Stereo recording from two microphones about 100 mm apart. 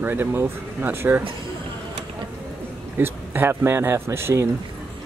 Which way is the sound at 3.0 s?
25° right (ahead or behind).